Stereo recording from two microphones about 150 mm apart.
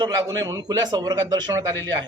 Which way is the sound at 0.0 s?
25° right (ahead or behind).